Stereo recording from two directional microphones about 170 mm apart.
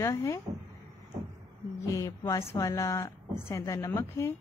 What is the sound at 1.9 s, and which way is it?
A woman's voice, 20° left (ahead or behind).